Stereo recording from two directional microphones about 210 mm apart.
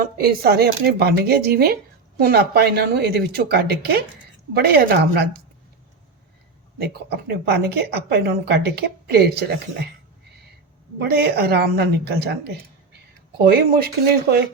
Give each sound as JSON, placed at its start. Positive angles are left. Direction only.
{"t": 0.0, "sound": "speech", "side_deg": -45}
{"t": 6.7, "sound": "speech", "side_deg": -50}
{"t": 11.0, "sound": "speech", "side_deg": -50}